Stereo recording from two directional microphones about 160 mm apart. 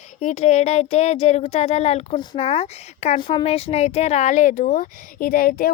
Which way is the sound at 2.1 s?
25° left (ahead or behind).